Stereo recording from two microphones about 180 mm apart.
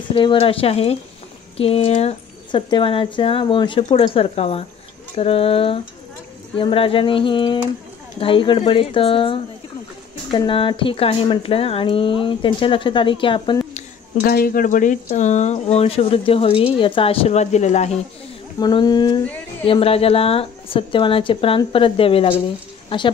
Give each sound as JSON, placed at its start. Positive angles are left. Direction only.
{"t": 0.1, "sound": "speech", "side_deg": 30}
{"t": 14.2, "sound": "speech", "side_deg": 55}
{"t": 18.6, "sound": "speech", "side_deg": 25}